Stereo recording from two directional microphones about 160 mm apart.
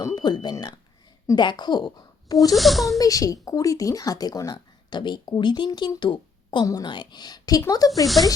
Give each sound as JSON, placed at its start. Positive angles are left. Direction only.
{"t": 0.0, "sound": "speech", "side_deg": 25}
{"t": 2.6, "sound": "speech", "side_deg": 0}
{"t": 3.0, "sound": "speech", "side_deg": 20}
{"t": 8.0, "sound": "speech", "side_deg": 0}